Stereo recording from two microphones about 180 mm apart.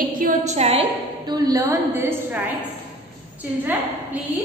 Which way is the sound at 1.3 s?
20° right (ahead or behind).